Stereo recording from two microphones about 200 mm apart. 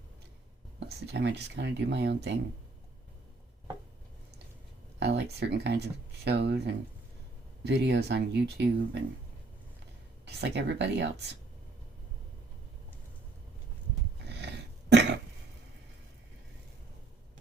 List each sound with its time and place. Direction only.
0.9 s speech: 60° right (ahead or behind)
4.9 s speech: 60° right (ahead or behind)
10.2 s speech: 60° right (ahead or behind)
14.3 s dog: 60° right (ahead or behind)